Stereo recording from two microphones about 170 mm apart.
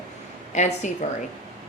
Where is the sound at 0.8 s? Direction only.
45° left (ahead or behind).